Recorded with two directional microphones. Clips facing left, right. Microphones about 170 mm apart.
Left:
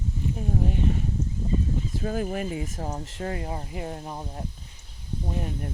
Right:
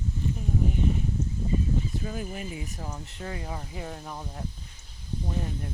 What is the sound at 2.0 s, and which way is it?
Speech, 50° left (ahead or behind).